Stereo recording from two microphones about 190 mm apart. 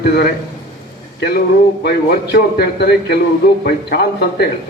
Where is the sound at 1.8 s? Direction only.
60° left (ahead or behind).